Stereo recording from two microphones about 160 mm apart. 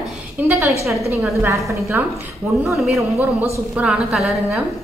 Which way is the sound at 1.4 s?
15° right (ahead or behind).